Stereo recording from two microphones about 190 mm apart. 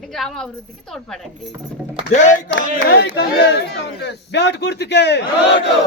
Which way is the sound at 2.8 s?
60° left (ahead or behind).